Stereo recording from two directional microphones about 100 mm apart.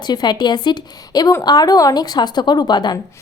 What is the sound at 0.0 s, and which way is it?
A woman's voice, 45° left (ahead or behind).